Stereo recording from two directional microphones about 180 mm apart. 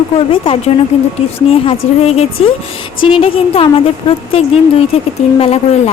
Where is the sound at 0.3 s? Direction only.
30° left (ahead or behind).